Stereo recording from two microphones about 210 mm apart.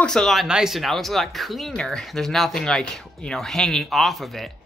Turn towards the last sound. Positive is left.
turn(degrees=0)  # may be behind; listen again after turning